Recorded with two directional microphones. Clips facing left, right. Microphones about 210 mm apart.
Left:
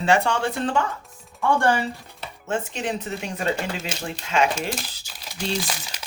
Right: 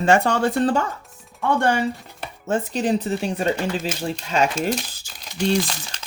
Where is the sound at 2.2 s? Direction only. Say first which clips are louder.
Right 4 dB; 40° right (ahead or behind).